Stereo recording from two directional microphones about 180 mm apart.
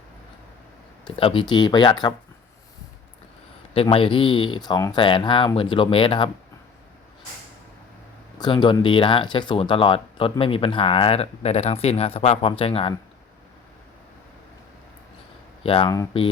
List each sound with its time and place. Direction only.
1.0 s speech: 30° left (ahead or behind)
3.8 s speech: 30° left (ahead or behind)
8.4 s speech: 25° left (ahead or behind)
15.6 s speech: 30° left (ahead or behind)